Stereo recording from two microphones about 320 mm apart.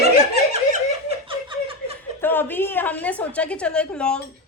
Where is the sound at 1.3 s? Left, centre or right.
Centre.